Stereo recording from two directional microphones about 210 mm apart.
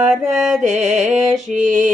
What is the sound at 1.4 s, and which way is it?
Mantra, 35° right (ahead or behind).